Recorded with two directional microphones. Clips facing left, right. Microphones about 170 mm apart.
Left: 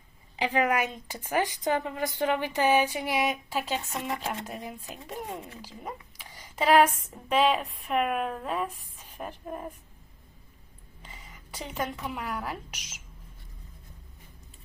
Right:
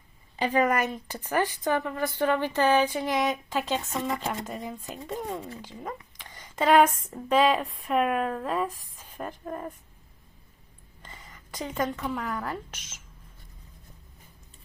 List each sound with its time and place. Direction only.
0.3 s a woman's voice: 10° left (ahead or behind)
11.0 s a sound: 5° left (ahead or behind)
11.9 s a woman's voice: 10° left (ahead or behind)